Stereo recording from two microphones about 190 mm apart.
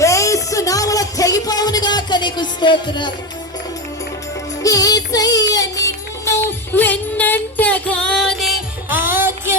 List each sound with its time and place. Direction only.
0.0 s a sound: 15° left (ahead or behind)
4.6 s child singing: 20° left (ahead or behind); by 8.5 s centre (ahead or behind)
8.9 s music: 10° right (ahead or behind)